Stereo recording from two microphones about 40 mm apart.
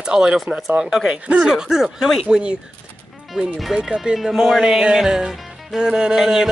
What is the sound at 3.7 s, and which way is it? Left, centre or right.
Music, centre.